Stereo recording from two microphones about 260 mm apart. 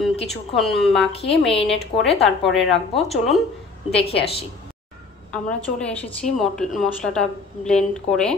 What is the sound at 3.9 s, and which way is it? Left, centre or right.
Speech, left.